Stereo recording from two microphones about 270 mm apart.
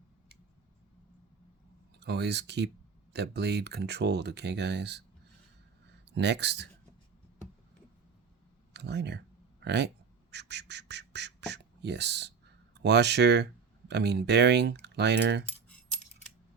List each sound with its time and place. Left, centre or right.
2.0 s speech: right
6.1 s speech: right
8.7 s a sound: right
10.3 s speech: right